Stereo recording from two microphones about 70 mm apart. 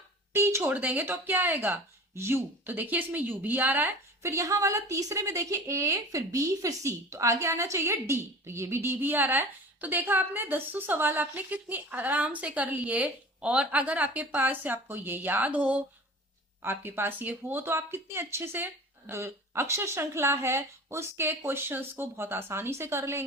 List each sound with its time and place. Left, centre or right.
0.3 s speech: right
0.7 s a woman's voice: right
4.2 s a woman's voice: right